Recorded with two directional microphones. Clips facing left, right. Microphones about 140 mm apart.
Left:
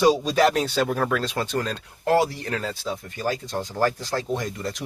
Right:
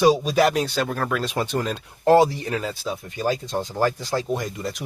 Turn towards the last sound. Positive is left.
turn(degrees=-10)  # may be behind; listen again after turning